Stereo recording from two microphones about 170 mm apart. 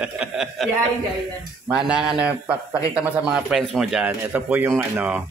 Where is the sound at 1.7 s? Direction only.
5° right (ahead or behind).